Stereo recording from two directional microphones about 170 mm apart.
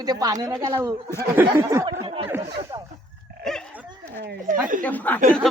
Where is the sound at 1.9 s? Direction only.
30° right (ahead or behind).